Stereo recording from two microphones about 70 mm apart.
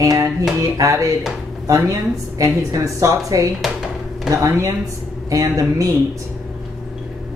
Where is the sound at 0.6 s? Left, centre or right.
Right.